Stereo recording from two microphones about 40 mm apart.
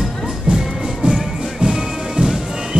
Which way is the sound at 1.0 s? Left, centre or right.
Centre.